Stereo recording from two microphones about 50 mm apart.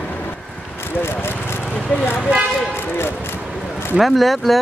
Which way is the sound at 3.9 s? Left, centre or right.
Centre.